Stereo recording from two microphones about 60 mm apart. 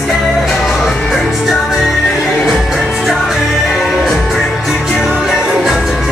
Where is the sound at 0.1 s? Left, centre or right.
Centre.